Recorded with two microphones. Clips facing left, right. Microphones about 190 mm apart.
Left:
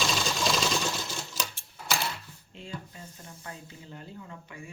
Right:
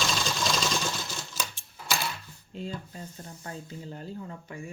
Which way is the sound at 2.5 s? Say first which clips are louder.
Right 5 dB; 40° right (ahead or behind).